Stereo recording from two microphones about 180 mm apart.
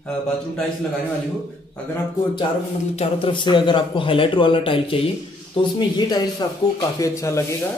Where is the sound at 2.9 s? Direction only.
35° left (ahead or behind).